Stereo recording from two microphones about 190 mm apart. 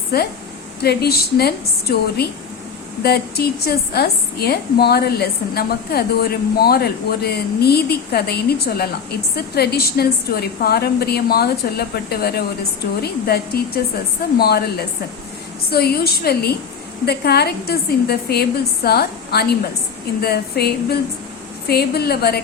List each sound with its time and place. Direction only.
0.1 s a woman's voice: 55° left (ahead or behind)